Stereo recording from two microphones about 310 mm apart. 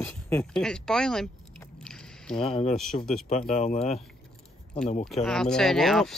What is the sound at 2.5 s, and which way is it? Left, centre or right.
Speech, centre.